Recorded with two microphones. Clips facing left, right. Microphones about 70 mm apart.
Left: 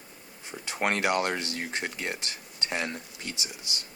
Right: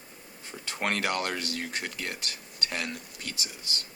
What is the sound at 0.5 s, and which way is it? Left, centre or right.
Speech, centre.